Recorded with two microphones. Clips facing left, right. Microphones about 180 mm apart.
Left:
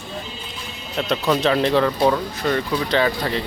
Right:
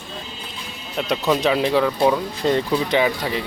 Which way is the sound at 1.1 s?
10° right (ahead or behind).